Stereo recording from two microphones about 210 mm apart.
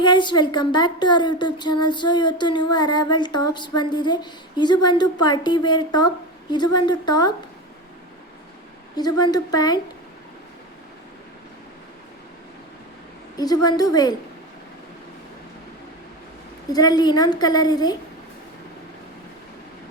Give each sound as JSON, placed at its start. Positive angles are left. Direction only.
{"t": 0.0, "sound": "speech", "side_deg": 20}
{"t": 9.0, "sound": "speech", "side_deg": 20}
{"t": 13.4, "sound": "speech", "side_deg": 20}
{"t": 16.7, "sound": "speech", "side_deg": 20}